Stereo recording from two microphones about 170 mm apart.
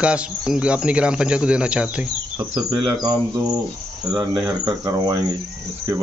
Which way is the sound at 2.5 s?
25° right (ahead or behind).